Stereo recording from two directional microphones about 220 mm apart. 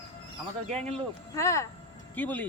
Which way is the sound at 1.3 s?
15° left (ahead or behind).